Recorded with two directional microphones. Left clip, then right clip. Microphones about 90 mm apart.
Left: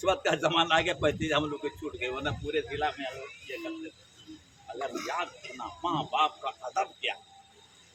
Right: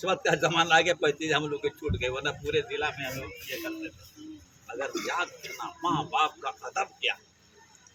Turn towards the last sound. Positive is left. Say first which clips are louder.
# right 1 dB
turn(degrees=20)  # may be behind; listen again after turning